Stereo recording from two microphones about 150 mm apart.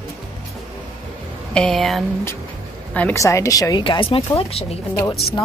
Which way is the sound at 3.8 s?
35° left (ahead or behind).